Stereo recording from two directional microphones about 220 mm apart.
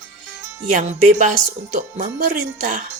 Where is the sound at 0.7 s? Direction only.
35° right (ahead or behind).